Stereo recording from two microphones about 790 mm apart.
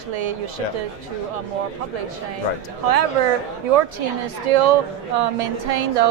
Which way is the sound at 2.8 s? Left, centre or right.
Right.